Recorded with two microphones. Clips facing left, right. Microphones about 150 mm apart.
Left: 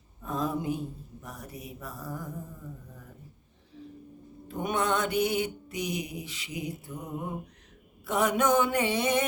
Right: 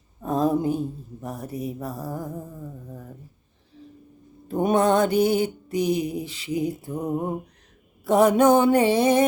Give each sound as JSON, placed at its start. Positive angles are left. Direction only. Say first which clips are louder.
{"t": 0.2, "sound": "a sound", "louder": "right 9 dB", "side_deg": -35}
{"t": 1.2, "sound": "mantra", "louder": "right 12 dB", "side_deg": -30}
{"t": 4.4, "sound": "mantra", "louder": "right 9 dB", "side_deg": -35}